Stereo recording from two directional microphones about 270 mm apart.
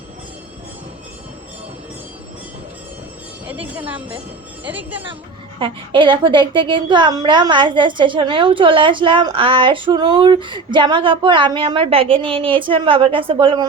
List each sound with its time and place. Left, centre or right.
3.4 s speech: centre
5.5 s a woman's voice: centre